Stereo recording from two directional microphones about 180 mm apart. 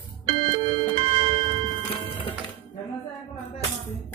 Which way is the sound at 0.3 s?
30° right (ahead or behind).